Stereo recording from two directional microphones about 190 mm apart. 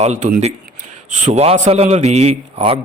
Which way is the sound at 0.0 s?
40° right (ahead or behind).